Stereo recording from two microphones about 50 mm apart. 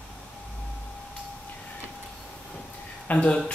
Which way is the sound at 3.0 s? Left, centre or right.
Left.